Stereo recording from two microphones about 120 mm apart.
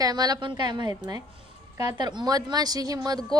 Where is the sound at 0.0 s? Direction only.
35° right (ahead or behind).